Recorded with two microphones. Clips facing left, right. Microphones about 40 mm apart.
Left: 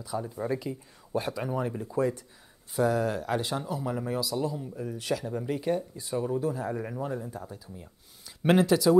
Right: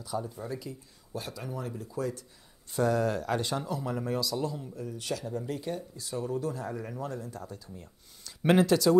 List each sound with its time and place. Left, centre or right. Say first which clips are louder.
0.2 s speech: left 6 dB; left
0.6 s speech: left 6 dB; left
2.7 s speech: left 1 dB; centre
8.4 s speech: left 1 dB; centre